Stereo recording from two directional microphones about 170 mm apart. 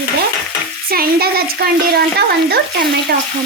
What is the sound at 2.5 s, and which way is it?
Speech, 70° right (ahead or behind).